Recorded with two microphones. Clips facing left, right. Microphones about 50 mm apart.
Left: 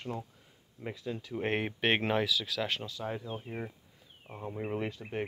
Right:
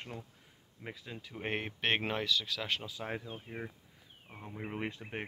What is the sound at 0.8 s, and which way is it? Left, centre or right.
Speech, centre.